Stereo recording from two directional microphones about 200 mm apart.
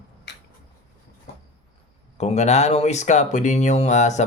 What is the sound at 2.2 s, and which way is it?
Speech, 35° left (ahead or behind).